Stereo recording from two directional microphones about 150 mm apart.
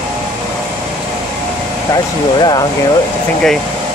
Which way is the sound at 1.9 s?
25° left (ahead or behind).